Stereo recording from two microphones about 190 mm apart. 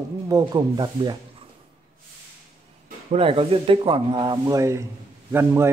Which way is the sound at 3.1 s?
30° right (ahead or behind).